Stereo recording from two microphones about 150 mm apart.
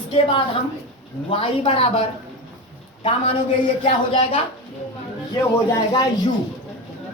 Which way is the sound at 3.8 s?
35° left (ahead or behind).